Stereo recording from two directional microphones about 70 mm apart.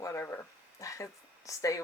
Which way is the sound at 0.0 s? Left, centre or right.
Left.